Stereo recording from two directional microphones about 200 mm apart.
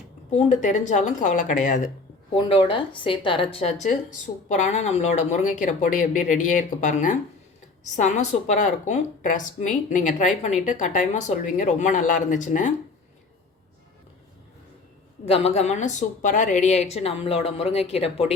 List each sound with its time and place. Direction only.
0.3 s a woman's voice: 35° left (ahead or behind)
2.3 s a woman's voice: 25° left (ahead or behind)
15.3 s a woman's voice: 30° left (ahead or behind)